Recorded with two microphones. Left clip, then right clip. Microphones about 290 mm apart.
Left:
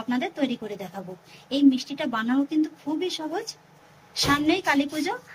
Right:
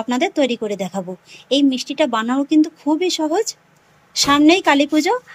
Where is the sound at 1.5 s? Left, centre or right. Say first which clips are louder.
Right 5 dB; right.